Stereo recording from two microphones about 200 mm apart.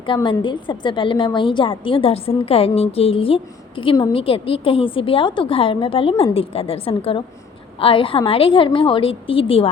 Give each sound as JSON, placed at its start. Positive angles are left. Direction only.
{"t": 0.0, "sound": "a woman's voice", "side_deg": 25}